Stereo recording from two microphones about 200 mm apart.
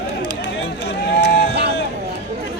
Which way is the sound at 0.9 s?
55° left (ahead or behind).